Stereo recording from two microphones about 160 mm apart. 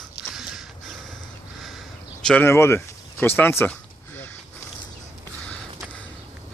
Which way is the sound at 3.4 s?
15° left (ahead or behind).